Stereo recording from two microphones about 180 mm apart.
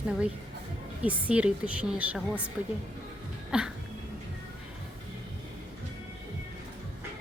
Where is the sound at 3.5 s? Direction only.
5° right (ahead or behind).